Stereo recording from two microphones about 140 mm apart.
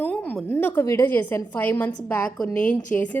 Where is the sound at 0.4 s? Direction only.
15° left (ahead or behind).